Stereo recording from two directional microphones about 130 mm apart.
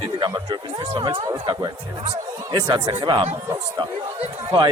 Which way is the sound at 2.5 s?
35° right (ahead or behind).